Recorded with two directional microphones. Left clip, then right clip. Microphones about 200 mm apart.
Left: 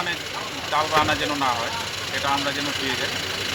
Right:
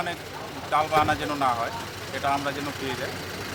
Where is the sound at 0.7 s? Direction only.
25° right (ahead or behind).